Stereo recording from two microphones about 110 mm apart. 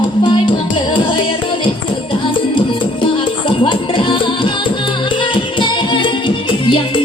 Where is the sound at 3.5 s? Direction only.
50° left (ahead or behind).